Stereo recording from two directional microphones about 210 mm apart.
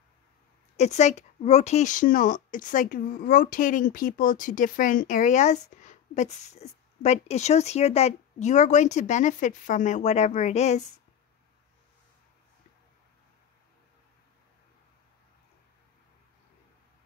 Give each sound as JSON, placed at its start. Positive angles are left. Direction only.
{"t": 0.7, "sound": "speech", "side_deg": 30}